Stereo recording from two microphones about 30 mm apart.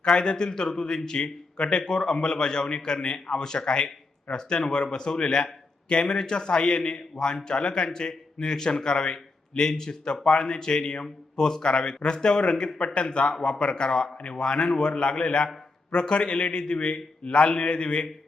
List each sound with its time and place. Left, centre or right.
0.0 s a man's voice: left
11.0 s speech: left